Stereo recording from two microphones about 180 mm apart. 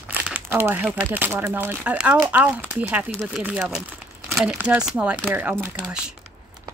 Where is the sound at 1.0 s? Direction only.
10° right (ahead or behind).